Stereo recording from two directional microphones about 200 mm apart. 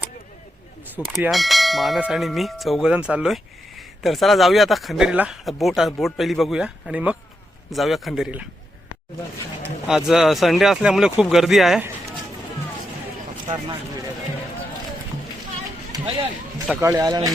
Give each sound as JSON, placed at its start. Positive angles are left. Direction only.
{"t": 0.9, "sound": "church bell", "side_deg": -5}
{"t": 9.6, "sound": "church bell", "side_deg": -5}
{"t": 15.9, "sound": "a sound", "side_deg": -20}
{"t": 16.8, "sound": "speech", "side_deg": -20}